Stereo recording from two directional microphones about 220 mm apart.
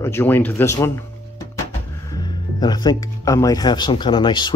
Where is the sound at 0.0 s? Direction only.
10° left (ahead or behind).